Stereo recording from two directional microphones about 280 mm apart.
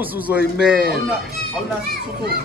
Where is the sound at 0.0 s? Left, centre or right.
Centre.